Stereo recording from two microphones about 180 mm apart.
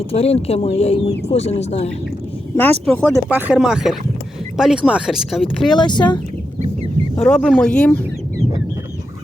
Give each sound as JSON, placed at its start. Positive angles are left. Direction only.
{"t": 0.1, "sound": "speech", "side_deg": 35}
{"t": 2.6, "sound": "speech", "side_deg": 10}
{"t": 5.7, "sound": "speech", "side_deg": 25}
{"t": 7.2, "sound": "speech", "side_deg": 5}